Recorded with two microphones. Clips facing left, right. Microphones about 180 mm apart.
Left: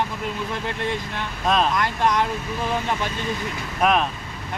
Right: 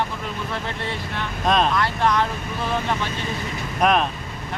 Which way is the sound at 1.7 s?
15° left (ahead or behind).